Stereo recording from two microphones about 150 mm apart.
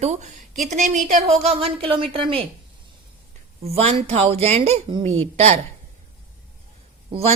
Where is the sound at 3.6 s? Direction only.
45° right (ahead or behind).